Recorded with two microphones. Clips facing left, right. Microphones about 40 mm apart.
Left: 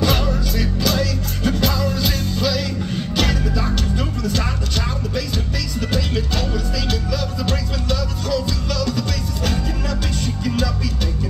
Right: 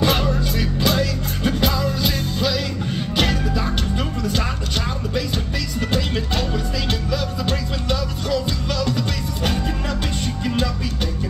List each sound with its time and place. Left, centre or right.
0.0 s music: centre
5.9 s music: right